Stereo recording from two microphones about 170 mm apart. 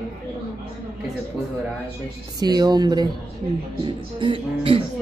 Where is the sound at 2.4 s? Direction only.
25° right (ahead or behind).